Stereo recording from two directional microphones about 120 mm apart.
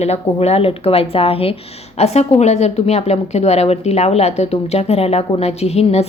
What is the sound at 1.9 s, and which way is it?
Speech, 65° left (ahead or behind).